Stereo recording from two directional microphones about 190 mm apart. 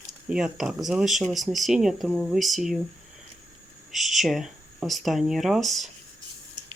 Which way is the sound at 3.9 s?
Centre (ahead or behind).